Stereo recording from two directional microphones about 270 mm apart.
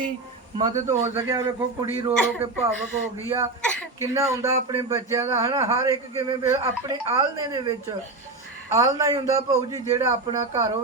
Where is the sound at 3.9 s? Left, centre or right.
Centre.